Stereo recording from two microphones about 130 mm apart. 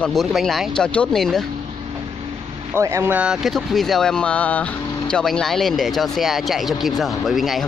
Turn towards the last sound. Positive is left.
turn(degrees=0)  # may be behind; listen again after turning